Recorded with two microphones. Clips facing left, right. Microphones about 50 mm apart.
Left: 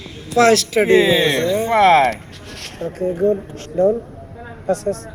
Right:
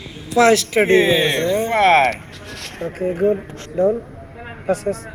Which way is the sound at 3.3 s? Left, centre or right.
Right.